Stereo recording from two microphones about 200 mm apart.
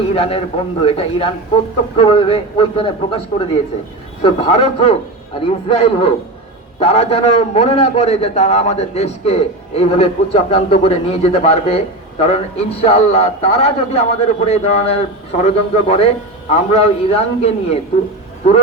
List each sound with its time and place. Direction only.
0.1 s a man's voice: 30° left (ahead or behind)